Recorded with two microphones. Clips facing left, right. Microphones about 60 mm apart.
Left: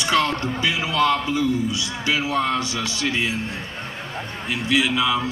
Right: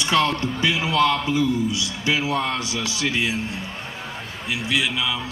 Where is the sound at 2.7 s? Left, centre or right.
Centre.